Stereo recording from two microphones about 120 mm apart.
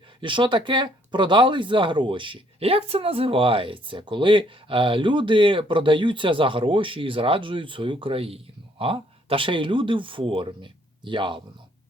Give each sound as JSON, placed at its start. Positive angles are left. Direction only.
{"t": 0.2, "sound": "speech", "side_deg": -40}